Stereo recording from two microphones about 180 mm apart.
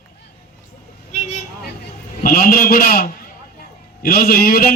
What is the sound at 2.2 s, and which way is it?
A man's voice, 55° left (ahead or behind).